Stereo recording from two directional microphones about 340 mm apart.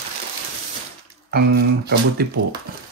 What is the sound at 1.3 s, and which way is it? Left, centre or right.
Speech, right.